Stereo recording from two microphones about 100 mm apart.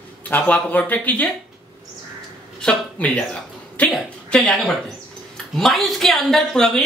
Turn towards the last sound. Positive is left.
turn(degrees=5)  # may be behind; listen again after turning